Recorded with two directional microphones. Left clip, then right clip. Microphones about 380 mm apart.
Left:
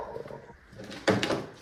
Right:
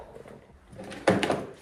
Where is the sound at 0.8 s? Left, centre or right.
Centre.